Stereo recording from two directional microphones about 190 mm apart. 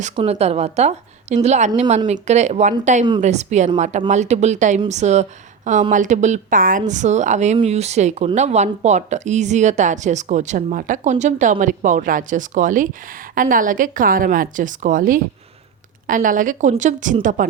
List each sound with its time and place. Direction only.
0.2 s a woman's voice: 35° right (ahead or behind)